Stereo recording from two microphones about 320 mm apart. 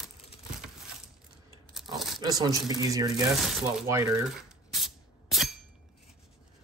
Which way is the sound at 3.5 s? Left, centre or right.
Centre.